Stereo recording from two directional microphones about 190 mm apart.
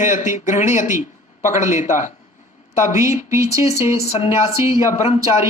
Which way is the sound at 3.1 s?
40° left (ahead or behind).